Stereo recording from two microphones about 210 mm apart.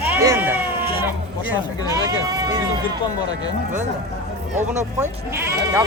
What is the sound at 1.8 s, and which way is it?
Speech, 20° left (ahead or behind).